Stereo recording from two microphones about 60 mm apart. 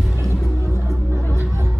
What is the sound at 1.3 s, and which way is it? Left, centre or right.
Music, right.